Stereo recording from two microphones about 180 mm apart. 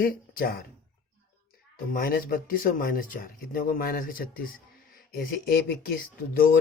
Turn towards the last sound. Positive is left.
turn(degrees=55)  # may be behind; listen again after turning